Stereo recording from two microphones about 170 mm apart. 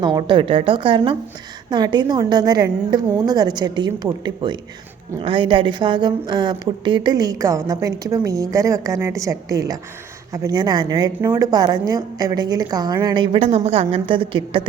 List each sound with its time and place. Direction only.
0.0 s a woman's voice: 25° right (ahead or behind)